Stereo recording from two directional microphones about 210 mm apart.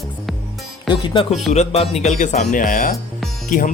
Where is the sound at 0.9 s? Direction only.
20° left (ahead or behind).